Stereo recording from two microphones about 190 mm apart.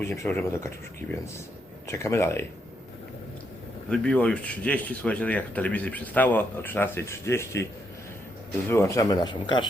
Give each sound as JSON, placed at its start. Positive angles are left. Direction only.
{"t": 0.0, "sound": "speech", "side_deg": 15}
{"t": 1.9, "sound": "speech", "side_deg": 15}
{"t": 3.8, "sound": "speech", "side_deg": 5}
{"t": 8.7, "sound": "speech", "side_deg": 15}